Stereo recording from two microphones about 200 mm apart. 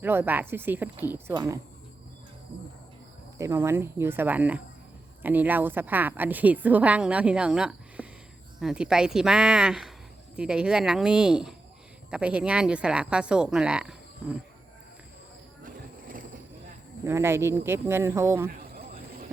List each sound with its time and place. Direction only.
0.0 s a woman's voice: 10° right (ahead or behind)
3.3 s a woman's voice: 15° right (ahead or behind)
15.6 s mechanisms: 45° right (ahead or behind)
17.0 s a woman's voice: 15° right (ahead or behind)